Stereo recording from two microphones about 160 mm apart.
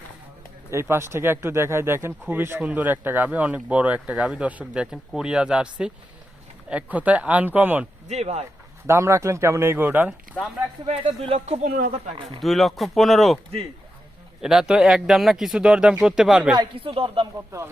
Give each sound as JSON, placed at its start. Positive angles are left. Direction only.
{"t": 0.7, "sound": "speech", "side_deg": -15}
{"t": 8.0, "sound": "speech", "side_deg": -45}
{"t": 8.9, "sound": "speech", "side_deg": -15}
{"t": 10.3, "sound": "speech", "side_deg": 0}
{"t": 10.8, "sound": "speech", "side_deg": -40}
{"t": 12.4, "sound": "speech", "side_deg": 0}
{"t": 14.4, "sound": "speech", "side_deg": -5}
{"t": 16.6, "sound": "speech", "side_deg": -35}